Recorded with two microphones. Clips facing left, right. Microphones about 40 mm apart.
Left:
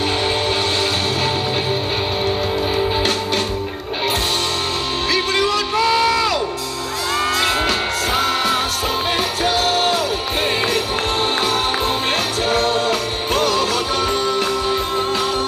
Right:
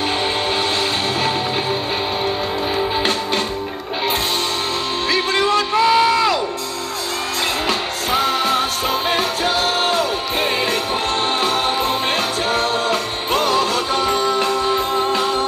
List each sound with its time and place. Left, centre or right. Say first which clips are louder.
5.1 s music: even; centre
5.8 s a sound: right 2 dB; centre
8.1 s music: right 2 dB; centre
12.4 s music: left 3 dB; centre